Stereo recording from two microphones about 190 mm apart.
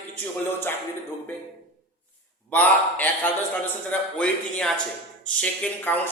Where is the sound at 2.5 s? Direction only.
10° left (ahead or behind).